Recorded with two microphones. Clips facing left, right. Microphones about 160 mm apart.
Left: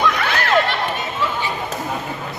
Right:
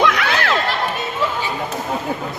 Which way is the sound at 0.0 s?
80° right.